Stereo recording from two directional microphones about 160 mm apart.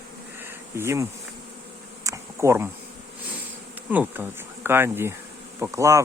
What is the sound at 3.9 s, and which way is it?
Speech, 10° right (ahead or behind).